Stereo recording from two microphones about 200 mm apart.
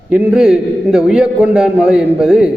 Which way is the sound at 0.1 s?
5° right (ahead or behind).